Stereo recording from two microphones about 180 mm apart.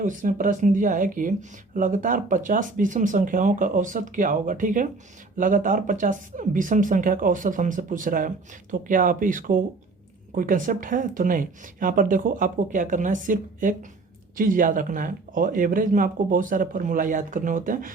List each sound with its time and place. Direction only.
0.0 s speech: 45° right (ahead or behind)